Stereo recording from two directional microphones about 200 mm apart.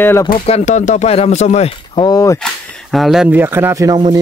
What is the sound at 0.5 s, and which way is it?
Speech, 35° left (ahead or behind).